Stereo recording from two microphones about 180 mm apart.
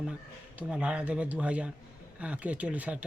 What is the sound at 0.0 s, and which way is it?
Speech, 5° right (ahead or behind).